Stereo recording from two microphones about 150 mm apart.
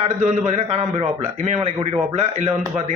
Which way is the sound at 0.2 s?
50° right (ahead or behind).